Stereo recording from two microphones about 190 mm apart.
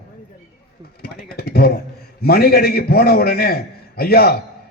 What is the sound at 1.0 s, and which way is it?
A man's voice, 60° left (ahead or behind).